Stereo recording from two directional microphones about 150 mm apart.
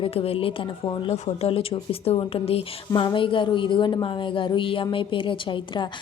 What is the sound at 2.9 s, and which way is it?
A woman's voice, 30° left (ahead or behind).